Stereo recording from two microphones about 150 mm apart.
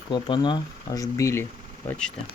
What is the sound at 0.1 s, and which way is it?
Speech, 30° left (ahead or behind).